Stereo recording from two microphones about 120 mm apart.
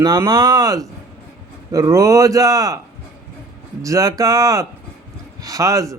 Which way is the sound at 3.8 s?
30° right (ahead or behind).